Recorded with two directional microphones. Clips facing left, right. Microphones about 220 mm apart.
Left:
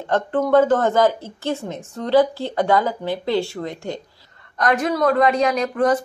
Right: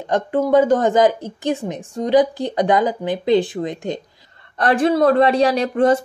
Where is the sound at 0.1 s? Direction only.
15° right (ahead or behind).